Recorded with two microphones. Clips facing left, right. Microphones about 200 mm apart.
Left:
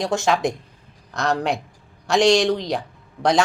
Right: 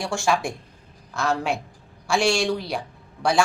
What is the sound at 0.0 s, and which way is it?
Speech, 20° left (ahead or behind).